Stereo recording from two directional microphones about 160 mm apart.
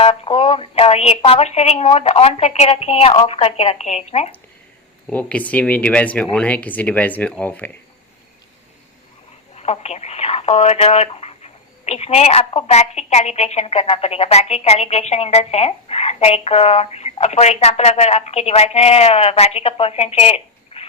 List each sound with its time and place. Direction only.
0.0 s speech: 35° left (ahead or behind)
5.0 s speech: 10° left (ahead or behind)
9.6 s speech: 40° left (ahead or behind)